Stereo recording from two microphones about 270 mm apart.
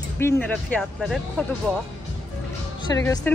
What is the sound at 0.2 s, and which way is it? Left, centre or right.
Speech, centre.